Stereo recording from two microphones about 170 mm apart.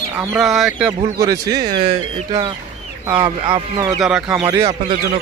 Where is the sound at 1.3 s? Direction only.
20° right (ahead or behind).